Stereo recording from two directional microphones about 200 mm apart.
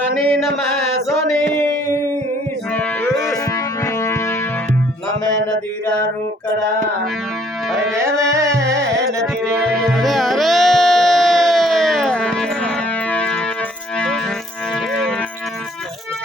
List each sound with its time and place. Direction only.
3.5 s music: 15° left (ahead or behind)
7.9 s carnatic music: 15° right (ahead or behind)
9.4 s music: centre (ahead or behind)